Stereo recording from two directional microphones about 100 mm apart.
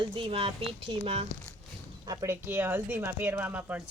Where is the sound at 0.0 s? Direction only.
60° right (ahead or behind); by 1.3 s 80° right.